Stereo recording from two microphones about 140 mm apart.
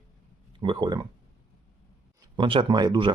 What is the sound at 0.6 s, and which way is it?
Speech, 35° right (ahead or behind).